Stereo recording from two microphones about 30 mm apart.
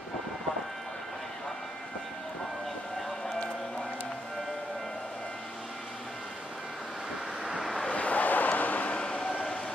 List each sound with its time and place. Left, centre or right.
7.9 s vehicle: left
8.9 s vehicle: left